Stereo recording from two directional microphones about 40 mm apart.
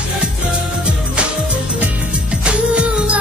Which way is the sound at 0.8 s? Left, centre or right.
Right.